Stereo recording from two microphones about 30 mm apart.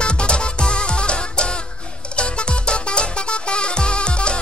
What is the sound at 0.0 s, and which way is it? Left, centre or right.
Music, left.